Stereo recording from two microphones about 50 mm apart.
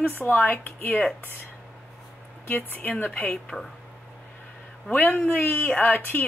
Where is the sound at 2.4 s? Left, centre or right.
Left.